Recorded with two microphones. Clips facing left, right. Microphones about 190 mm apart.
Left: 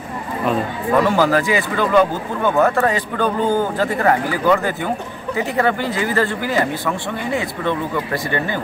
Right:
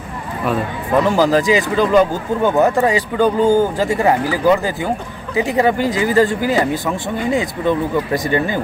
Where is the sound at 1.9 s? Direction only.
20° right (ahead or behind).